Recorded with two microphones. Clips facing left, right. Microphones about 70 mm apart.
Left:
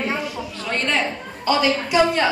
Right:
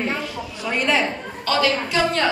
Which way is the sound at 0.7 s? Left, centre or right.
Centre.